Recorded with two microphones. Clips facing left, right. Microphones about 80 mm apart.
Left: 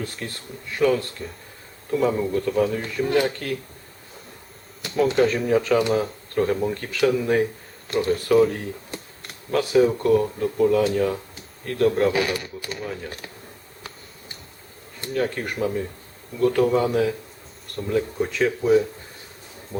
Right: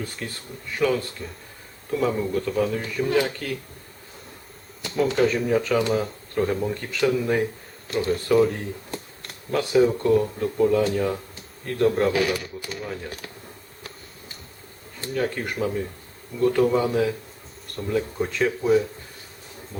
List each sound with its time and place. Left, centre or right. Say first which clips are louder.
0.2 s speech: left 1 dB; centre
4.8 s speech: left 2 dB; centre
15.1 s speech: left 1 dB; centre
19.7 s speech: left 6 dB; centre